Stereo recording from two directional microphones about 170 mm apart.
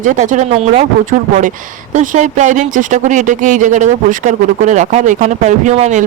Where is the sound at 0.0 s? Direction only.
50° right (ahead or behind).